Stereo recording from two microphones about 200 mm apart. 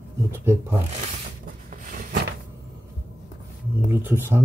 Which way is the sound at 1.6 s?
45° right (ahead or behind).